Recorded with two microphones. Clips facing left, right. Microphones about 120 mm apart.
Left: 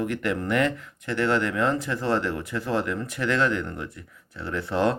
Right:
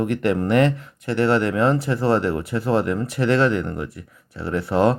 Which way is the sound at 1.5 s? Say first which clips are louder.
Right 5 dB; 25° right (ahead or behind).